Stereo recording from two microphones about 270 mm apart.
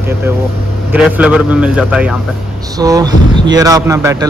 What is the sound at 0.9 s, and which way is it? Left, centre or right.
A man's voice, centre.